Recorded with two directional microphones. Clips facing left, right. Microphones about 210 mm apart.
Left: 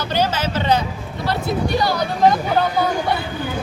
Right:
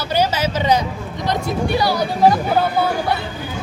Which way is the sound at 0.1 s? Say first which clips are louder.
Right 3 dB; 10° right (ahead or behind).